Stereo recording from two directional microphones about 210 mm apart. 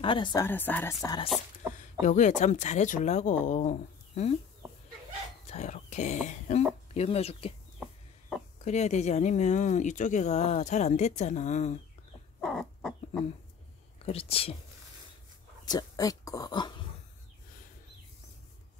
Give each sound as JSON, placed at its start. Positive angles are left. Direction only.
{"t": 0.0, "sound": "speech", "side_deg": 25}
{"t": 0.5, "sound": "speech", "side_deg": 10}
{"t": 2.0, "sound": "speech", "side_deg": 35}
{"t": 5.5, "sound": "a sound", "side_deg": 35}
{"t": 6.2, "sound": "speech", "side_deg": 35}
{"t": 8.6, "sound": "speech", "side_deg": 35}
{"t": 12.4, "sound": "chicken", "side_deg": 0}
{"t": 14.0, "sound": "speech", "side_deg": 25}
{"t": 15.6, "sound": "speech", "side_deg": 20}